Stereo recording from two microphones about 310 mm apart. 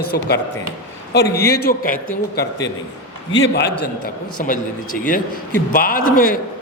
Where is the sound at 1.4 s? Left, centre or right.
Left.